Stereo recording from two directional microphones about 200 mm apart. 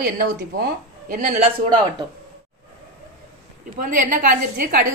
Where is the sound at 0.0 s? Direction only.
45° right (ahead or behind).